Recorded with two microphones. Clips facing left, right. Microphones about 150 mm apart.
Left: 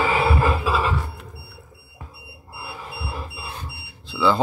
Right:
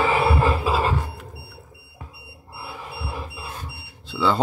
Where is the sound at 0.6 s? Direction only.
50° right (ahead or behind).